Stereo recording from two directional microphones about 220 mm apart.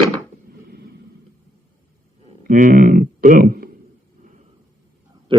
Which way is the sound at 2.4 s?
40° right (ahead or behind).